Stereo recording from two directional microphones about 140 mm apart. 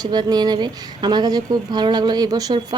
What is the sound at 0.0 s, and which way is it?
Speech, 30° right (ahead or behind).